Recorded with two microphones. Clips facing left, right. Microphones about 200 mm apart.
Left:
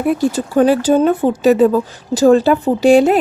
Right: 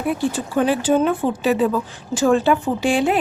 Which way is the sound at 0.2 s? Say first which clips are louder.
Left 6 dB; 40° left (ahead or behind).